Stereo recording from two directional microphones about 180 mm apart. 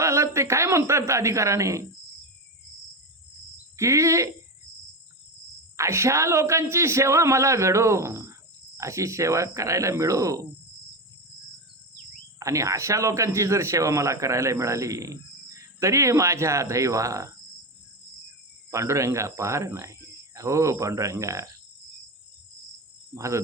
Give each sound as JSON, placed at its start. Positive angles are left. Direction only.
{"t": 0.0, "sound": "a man's voice", "side_deg": -15}
{"t": 3.8, "sound": "a man's voice", "side_deg": -15}
{"t": 5.7, "sound": "a man's voice", "side_deg": -15}
{"t": 12.4, "sound": "a man's voice", "side_deg": -15}
{"t": 18.7, "sound": "a man's voice", "side_deg": -15}
{"t": 23.1, "sound": "a man's voice", "side_deg": -15}